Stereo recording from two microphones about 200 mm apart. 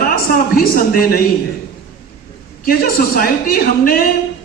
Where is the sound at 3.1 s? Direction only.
45° left (ahead or behind).